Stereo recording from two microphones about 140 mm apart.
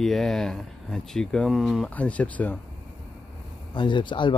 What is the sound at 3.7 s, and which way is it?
Speech, 35° left (ahead or behind).